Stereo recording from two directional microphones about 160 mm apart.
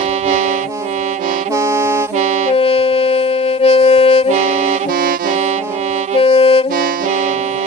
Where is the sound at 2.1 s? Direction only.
50° right (ahead or behind).